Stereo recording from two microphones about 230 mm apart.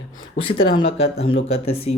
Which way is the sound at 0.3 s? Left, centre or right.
Left.